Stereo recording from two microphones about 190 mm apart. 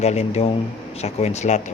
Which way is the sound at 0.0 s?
35° left (ahead or behind).